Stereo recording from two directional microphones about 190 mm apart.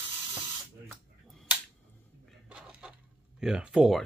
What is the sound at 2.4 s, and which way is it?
Chicken, 5° right (ahead or behind).